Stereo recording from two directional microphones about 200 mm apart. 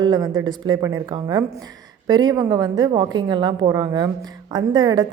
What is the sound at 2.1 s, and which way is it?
A woman's voice, 20° right (ahead or behind).